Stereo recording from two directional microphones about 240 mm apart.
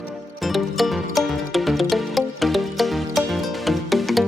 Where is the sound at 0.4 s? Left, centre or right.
Centre.